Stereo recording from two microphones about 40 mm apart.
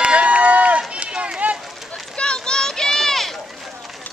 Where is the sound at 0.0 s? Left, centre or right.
Right.